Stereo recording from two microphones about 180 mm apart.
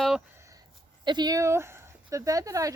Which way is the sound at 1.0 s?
25° right (ahead or behind).